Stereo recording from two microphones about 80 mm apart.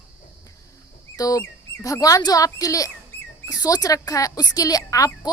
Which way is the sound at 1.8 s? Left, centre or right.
Left.